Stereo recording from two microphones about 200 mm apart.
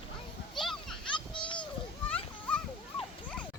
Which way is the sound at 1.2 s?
25° left (ahead or behind).